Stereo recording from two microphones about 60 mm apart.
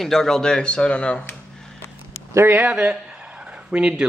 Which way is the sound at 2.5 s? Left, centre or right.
Right.